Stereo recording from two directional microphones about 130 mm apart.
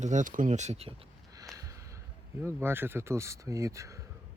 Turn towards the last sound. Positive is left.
turn(degrees=-25)  # may be behind; listen again after turning